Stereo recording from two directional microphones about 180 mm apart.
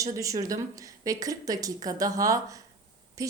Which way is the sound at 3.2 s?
20° right (ahead or behind).